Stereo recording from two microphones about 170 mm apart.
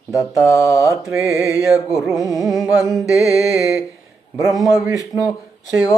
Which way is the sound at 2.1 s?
Centre (ahead or behind).